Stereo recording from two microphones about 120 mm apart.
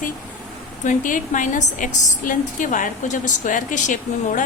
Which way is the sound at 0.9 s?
90° left.